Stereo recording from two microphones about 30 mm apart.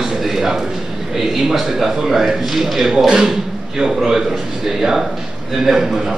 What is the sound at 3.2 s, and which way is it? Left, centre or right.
A man's voice, right.